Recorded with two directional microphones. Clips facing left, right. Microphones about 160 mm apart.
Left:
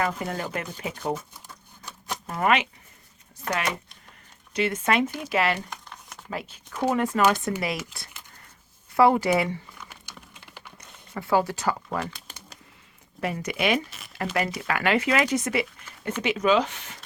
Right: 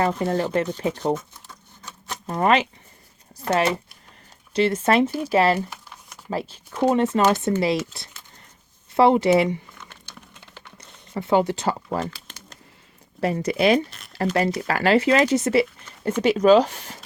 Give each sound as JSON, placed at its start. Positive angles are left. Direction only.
{"t": 0.0, "sound": "speech", "side_deg": -30}
{"t": 2.2, "sound": "speech", "side_deg": -30}
{"t": 5.5, "sound": "a sound", "side_deg": -5}
{"t": 6.3, "sound": "speech", "side_deg": -30}
{"t": 8.9, "sound": "speech", "side_deg": -25}
{"t": 9.7, "sound": "a sound", "side_deg": 10}
{"t": 10.8, "sound": "speech", "side_deg": -25}
{"t": 13.2, "sound": "speech", "side_deg": -35}